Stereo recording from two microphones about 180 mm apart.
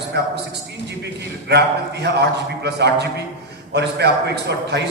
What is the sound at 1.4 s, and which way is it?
A man's voice, 70° right (ahead or behind).